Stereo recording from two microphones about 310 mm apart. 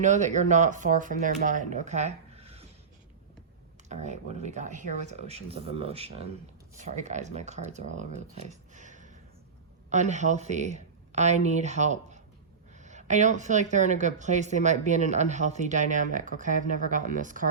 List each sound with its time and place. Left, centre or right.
0.0 s speech: right
3.8 s speech: right